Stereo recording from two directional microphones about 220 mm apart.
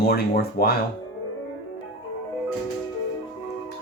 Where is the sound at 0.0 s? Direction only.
45° left (ahead or behind).